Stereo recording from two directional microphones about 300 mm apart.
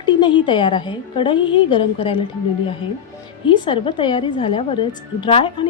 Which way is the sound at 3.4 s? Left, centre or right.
Centre.